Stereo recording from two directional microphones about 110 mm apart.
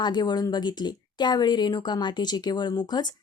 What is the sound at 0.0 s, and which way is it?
Speech, 40° left (ahead or behind).